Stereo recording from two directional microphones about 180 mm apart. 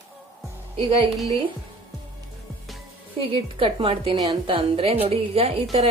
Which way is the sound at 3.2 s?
30° right (ahead or behind).